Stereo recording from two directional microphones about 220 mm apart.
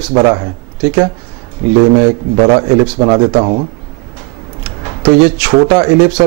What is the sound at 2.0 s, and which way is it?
Speech, 25° right (ahead or behind).